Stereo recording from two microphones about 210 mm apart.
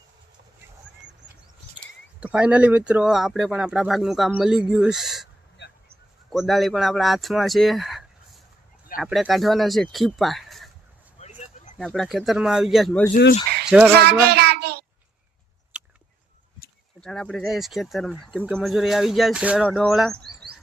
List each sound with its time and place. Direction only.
2.2 s speech: 5° right (ahead or behind)
6.3 s speech: centre (ahead or behind)
11.2 s a sound: 35° left (ahead or behind)
11.8 s speech: centre (ahead or behind)
13.7 s speech: 10° right (ahead or behind)
13.9 s child singing: 50° right (ahead or behind)
15.7 s a sound: 5° right (ahead or behind)
17.0 s speech: 5° left (ahead or behind)